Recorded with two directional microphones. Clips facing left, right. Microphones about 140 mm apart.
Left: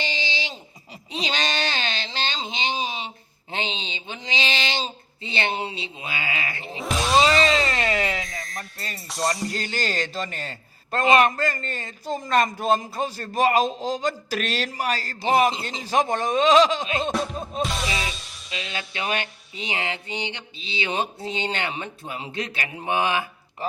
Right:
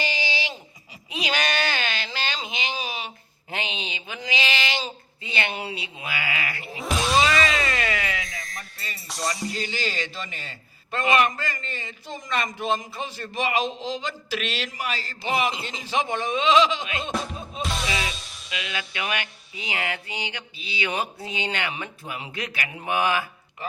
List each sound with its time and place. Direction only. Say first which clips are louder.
0.0 s a sound: right 1 dB; 25° left (ahead or behind)
6.7 s a sound: left 2 dB; centre (ahead or behind)
7.2 s music: left 4 dB; 30° left (ahead or behind)
8.5 s music: left 3 dB; 45° left (ahead or behind)
9.0 s music: left 4 dB; centre (ahead or behind)
9.3 s a man's voice: left 2 dB; 45° left (ahead or behind)
17.6 s music: left 1 dB; centre (ahead or behind)
18.5 s music: even; 30° left (ahead or behind)